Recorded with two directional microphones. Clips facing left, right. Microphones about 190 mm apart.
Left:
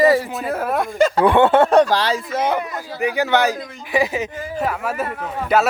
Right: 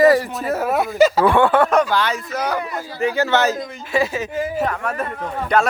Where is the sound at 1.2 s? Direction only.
20° left (ahead or behind).